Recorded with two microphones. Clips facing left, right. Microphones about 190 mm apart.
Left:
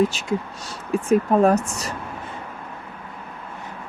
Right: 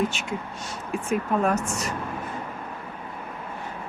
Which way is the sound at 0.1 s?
35° left (ahead or behind).